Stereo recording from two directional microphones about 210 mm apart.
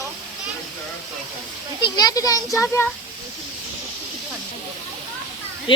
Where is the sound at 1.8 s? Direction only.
20° left (ahead or behind).